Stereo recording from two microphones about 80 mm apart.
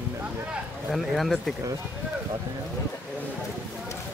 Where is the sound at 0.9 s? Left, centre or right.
Centre.